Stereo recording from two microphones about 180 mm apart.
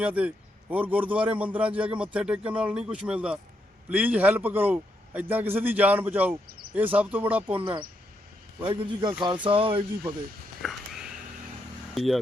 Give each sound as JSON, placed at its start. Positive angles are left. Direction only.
{"t": 0.0, "sound": "a man's voice", "side_deg": -5}
{"t": 7.6, "sound": "speech", "side_deg": -25}
{"t": 10.6, "sound": "a sound", "side_deg": 0}
{"t": 11.9, "sound": "speech", "side_deg": 0}